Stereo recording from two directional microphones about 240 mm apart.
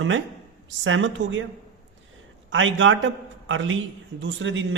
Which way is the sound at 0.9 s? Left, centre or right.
Right.